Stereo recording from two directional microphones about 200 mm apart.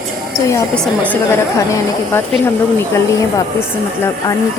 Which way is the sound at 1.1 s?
10° left (ahead or behind).